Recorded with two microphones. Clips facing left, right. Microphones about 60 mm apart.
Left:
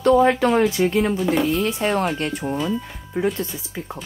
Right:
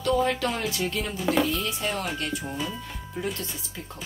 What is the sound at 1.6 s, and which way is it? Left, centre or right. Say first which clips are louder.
Speech: left 9 dB; left.